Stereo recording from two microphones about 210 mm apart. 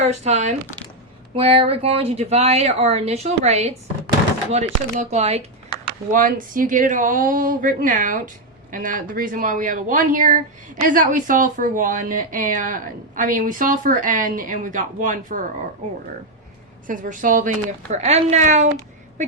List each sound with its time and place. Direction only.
0.0 s a woman's voice: 35° right (ahead or behind)
6.1 s a woman's voice: 40° right (ahead or behind)
16.8 s a woman's voice: 40° right (ahead or behind)